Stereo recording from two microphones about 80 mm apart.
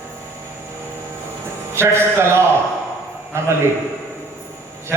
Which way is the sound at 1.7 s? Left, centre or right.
Right.